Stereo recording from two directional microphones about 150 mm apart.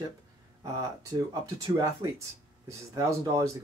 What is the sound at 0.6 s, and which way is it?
Speech, 25° right (ahead or behind).